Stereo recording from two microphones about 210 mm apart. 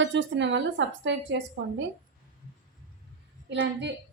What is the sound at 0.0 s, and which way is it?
A woman's voice, 60° right (ahead or behind).